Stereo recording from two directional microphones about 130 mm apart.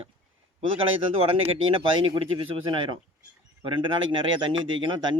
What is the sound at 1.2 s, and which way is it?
Speech, 50° right (ahead or behind).